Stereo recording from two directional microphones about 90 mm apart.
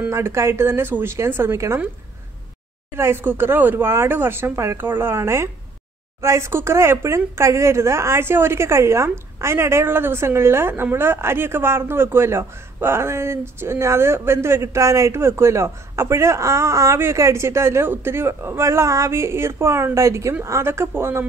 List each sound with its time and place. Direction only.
0.1 s speech: 30° right (ahead or behind)
3.0 s speech: 25° right (ahead or behind)